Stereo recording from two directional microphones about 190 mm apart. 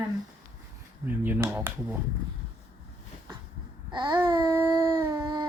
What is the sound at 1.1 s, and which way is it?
Speech, 10° right (ahead or behind).